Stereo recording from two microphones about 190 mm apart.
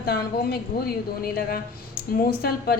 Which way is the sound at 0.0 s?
55° left (ahead or behind).